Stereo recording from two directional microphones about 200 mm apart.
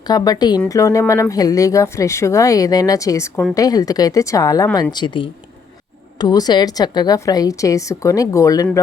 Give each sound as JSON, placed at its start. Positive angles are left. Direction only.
{"t": 0.1, "sound": "a woman's voice", "side_deg": 20}